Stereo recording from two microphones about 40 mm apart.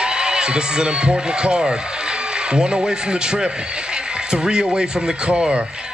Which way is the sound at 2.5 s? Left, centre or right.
Centre.